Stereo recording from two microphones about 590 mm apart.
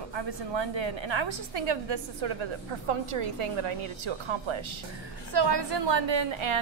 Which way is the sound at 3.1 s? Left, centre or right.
Right.